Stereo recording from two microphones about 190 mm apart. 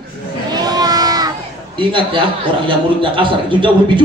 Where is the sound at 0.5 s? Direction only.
20° right (ahead or behind).